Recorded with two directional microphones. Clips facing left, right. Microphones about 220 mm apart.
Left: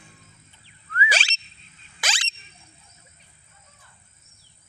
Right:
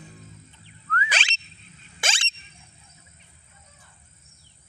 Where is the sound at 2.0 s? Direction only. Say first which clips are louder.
Right 1 dB; 25° right (ahead or behind).